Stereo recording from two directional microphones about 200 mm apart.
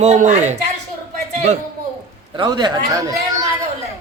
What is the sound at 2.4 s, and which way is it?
Speech, 20° right (ahead or behind).